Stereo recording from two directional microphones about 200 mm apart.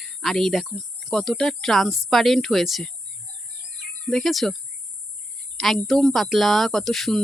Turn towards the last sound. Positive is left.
turn(degrees=0)  # may be behind; listen again after turning